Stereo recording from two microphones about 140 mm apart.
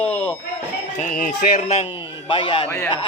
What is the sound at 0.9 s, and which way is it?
Speech, 70° left (ahead or behind).